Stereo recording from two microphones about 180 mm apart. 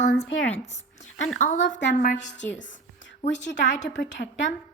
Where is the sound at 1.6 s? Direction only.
85° left.